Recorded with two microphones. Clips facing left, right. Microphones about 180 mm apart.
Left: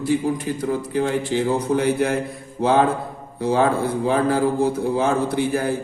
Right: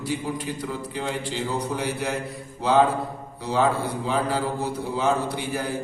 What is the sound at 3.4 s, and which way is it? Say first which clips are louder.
A man's voice: left 4 dB; 50° left (ahead or behind).